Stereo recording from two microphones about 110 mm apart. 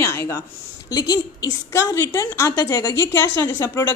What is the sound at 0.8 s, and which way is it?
A woman's voice, 35° left (ahead or behind).